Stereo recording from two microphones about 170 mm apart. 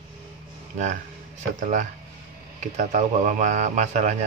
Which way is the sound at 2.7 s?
45° right (ahead or behind).